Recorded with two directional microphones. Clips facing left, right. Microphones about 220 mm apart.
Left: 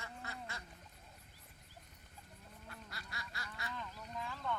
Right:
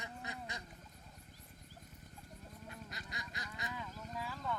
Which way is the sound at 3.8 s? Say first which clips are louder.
Right 1 dB; 5° right (ahead or behind).